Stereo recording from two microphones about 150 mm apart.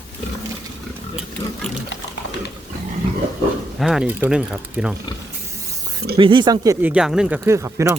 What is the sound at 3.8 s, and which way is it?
Speech, centre (ahead or behind).